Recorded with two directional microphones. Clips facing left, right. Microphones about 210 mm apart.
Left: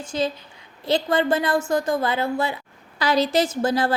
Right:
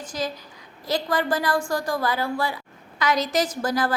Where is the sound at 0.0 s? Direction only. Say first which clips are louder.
Left 4 dB; 25° left (ahead or behind).